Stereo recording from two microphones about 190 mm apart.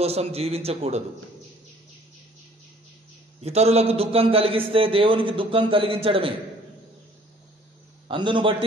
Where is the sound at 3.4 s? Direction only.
35° right (ahead or behind).